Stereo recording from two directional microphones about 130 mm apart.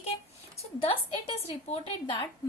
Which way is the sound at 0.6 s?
45° left (ahead or behind).